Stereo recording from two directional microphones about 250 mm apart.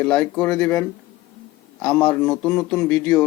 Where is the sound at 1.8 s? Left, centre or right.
Centre.